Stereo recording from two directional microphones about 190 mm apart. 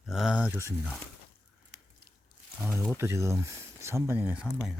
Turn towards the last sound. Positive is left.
turn(degrees=-5)  # may be behind; listen again after turning